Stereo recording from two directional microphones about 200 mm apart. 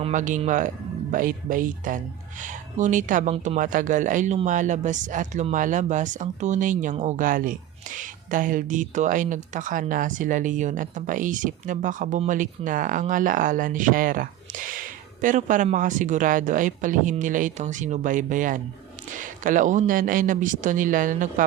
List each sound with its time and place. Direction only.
0.0 s speech: 40° right (ahead or behind)